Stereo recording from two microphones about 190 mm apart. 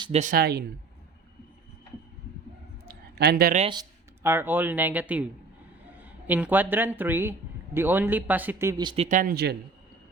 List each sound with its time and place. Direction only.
0.0 s speech: 35° right (ahead or behind); by 0.6 s 55° right (ahead or behind)
2.8 s a sound: 55° right (ahead or behind)
4.2 s speech: 10° right (ahead or behind)
8.8 s speech: 25° right (ahead or behind)
9.0 s speech: 45° right (ahead or behind)